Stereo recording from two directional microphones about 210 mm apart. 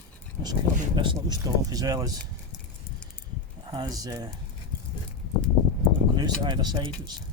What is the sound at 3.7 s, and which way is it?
Speech, 20° right (ahead or behind).